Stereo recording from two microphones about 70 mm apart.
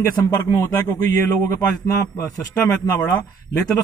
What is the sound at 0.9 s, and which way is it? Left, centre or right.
A man's voice, left.